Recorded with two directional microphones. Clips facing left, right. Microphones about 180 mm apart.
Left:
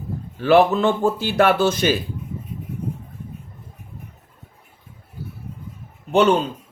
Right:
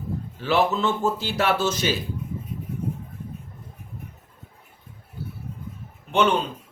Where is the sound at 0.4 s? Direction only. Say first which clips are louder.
Left 7 dB; 60° left (ahead or behind).